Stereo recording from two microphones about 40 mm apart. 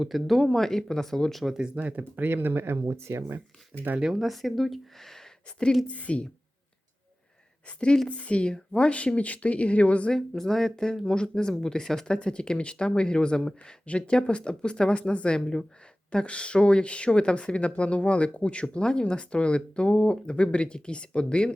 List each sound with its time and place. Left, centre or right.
0.0 s speech: centre
1.7 s speech: right
2.0 s speech: right
4.1 s speech: centre
5.9 s speech: left
8.0 s speech: left
10.2 s speech: centre; by 21.5 s left